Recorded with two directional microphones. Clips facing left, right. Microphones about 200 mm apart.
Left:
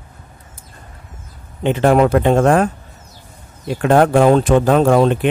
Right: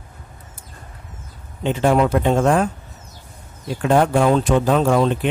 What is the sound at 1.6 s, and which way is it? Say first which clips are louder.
Speech: left 4 dB; 60° left (ahead or behind).